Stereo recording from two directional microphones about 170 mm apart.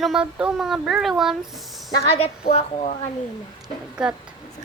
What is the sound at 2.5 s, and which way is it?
Speech, 40° left (ahead or behind).